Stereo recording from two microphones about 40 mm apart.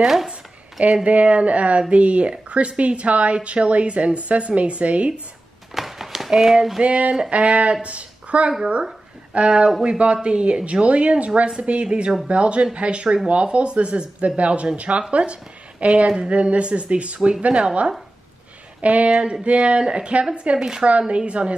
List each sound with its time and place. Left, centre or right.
0.0 s speech: centre
0.3 s a sound: right
1.0 s a woman's voice: right
5.8 s a sound: centre
6.3 s speech: centre
6.8 s a woman's voice: right
20.5 s speech: centre
21.3 s a woman's voice: right